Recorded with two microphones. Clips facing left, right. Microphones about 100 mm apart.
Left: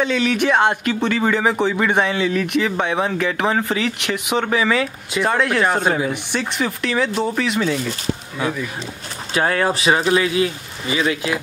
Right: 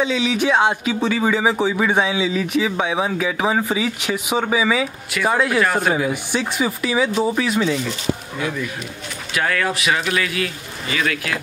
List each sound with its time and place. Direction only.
0.0 s speech: 10° right (ahead or behind)
9.3 s speech: 30° left (ahead or behind)